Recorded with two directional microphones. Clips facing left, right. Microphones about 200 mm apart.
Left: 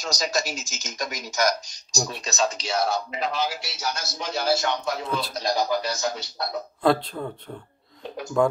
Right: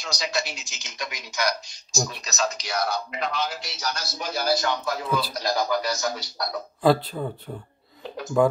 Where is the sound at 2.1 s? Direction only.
30° left (ahead or behind).